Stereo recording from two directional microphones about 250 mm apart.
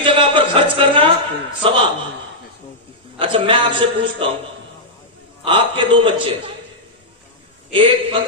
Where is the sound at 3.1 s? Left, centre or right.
Right.